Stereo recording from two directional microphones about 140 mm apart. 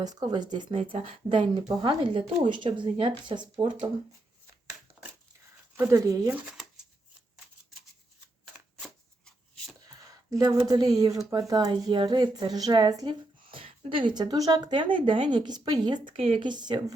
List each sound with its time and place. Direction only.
0.0 s speech: 30° right (ahead or behind)
5.7 s speech: 15° right (ahead or behind)
6.3 s speech: 5° right (ahead or behind)
8.8 s shuffling cards: centre (ahead or behind)
10.0 s speech: 25° right (ahead or behind)
13.5 s speech: 40° right (ahead or behind)